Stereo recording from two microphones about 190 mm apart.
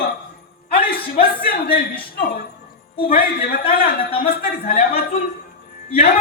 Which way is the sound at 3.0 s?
50° left (ahead or behind).